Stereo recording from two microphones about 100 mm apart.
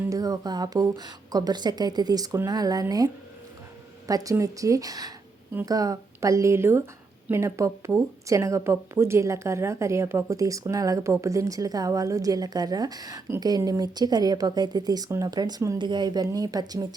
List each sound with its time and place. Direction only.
0.1 s a woman's voice: 40° right (ahead or behind)
4.0 s a woman's voice: 35° right (ahead or behind)
15.8 s a woman's voice: 50° right (ahead or behind)